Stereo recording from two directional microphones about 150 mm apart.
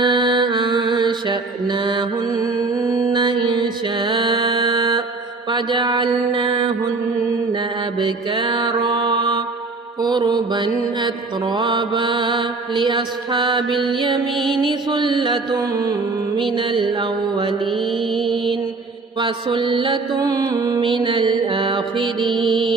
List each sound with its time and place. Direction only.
0.0 s mantra: 30° right (ahead or behind)
8.3 s mantra: 30° right (ahead or behind)
14.3 s music: centre (ahead or behind)
14.6 s mantra: 30° right (ahead or behind)
18.1 s mantra: centre (ahead or behind)
19.2 s mantra: 30° right (ahead or behind)
20.8 s mantra: 35° right (ahead or behind)